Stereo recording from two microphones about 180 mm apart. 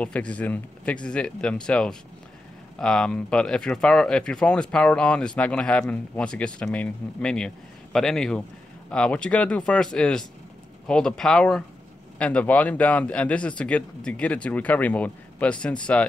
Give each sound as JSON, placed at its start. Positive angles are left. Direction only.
{"t": 0.0, "sound": "speech", "side_deg": 5}